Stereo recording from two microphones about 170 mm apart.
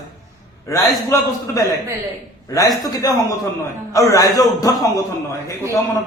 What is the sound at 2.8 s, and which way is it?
A man's voice, 20° left (ahead or behind).